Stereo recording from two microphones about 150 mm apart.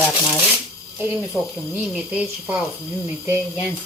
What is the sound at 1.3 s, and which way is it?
Speech, 5° right (ahead or behind).